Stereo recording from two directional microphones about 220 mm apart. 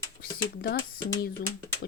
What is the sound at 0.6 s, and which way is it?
Speech, 45° left (ahead or behind).